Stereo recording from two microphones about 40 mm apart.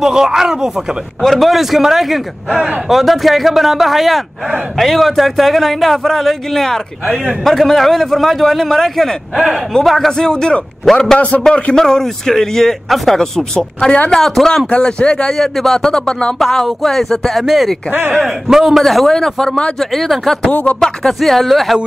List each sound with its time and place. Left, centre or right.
0.0 s speech: centre
1.2 s a man's voice: centre
10.3 s a man's voice: left
11.1 s a man's voice: left
11.7 s a man's voice: centre
13.4 s a man's voice: left
14.1 s a man's voice: centre
14.7 s a man's voice: left
15.3 s a man's voice: centre; by 16.3 s left
16.3 s a man's voice: centre
18.1 s speech: centre
18.9 s a man's voice: centre